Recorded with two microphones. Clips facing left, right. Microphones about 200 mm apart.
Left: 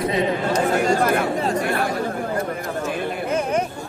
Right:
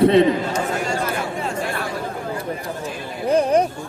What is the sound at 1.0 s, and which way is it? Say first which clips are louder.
Speech: left 5 dB; 60° left (ahead or behind).